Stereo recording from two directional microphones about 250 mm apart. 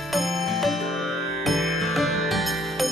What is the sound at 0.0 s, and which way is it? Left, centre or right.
Music, centre.